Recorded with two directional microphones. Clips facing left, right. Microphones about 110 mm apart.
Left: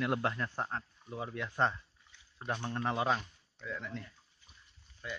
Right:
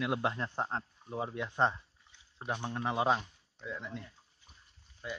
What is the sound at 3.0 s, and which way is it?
Speech, 20° right (ahead or behind).